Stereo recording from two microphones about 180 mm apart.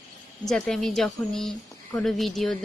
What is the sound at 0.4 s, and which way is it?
Speech, 5° left (ahead or behind).